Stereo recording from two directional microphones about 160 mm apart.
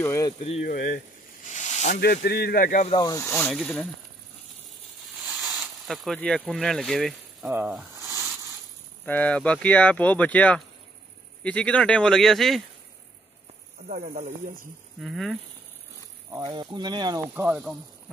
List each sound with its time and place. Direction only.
0.0 s speech: 20° left (ahead or behind)
0.7 s speech: 60° left (ahead or behind)
1.5 s snake: 45° left (ahead or behind)
2.0 s speech: 90° left; by 2.9 s 60° left (ahead or behind)
2.9 s speech: 25° left (ahead or behind); by 3.9 s 5° left (ahead or behind)
5.2 s a sound: centre (ahead or behind)
6.1 s speech: 5° left (ahead or behind)
7.9 s a sound: 15° right (ahead or behind)
9.0 s speech: 10° left (ahead or behind)
13.8 s speech: 50° right (ahead or behind)
15.0 s speech: centre (ahead or behind)
16.4 s speech: 30° right (ahead or behind)
17.3 s speech: 15° right (ahead or behind)